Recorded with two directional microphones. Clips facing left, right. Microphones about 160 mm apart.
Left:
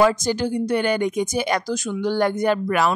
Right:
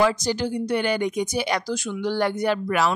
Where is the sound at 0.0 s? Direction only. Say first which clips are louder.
Left 3 dB; 50° left (ahead or behind).